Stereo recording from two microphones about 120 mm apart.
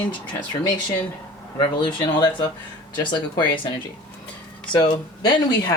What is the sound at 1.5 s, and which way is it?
Speech, 40° left (ahead or behind).